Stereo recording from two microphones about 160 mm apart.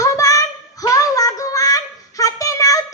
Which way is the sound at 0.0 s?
20° left (ahead or behind).